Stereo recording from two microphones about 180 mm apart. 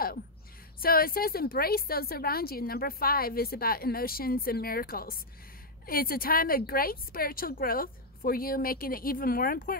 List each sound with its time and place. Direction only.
0.7 s a woman's voice: 55° left (ahead or behind)